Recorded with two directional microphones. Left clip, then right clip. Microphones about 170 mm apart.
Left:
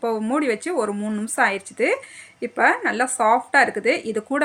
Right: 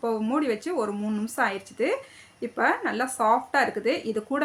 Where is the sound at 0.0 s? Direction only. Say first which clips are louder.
Left 4 dB; 25° left (ahead or behind).